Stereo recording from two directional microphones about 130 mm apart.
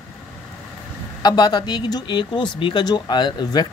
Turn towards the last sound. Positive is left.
turn(degrees=35)  # may be behind; listen again after turning